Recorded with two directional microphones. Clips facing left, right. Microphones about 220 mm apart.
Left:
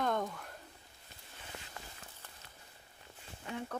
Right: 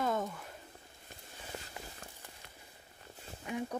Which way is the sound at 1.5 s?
35° right (ahead or behind).